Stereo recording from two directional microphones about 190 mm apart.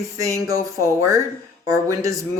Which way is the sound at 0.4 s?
15° right (ahead or behind).